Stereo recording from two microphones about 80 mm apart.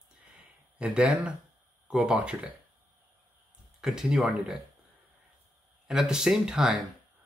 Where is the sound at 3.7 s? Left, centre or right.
Centre.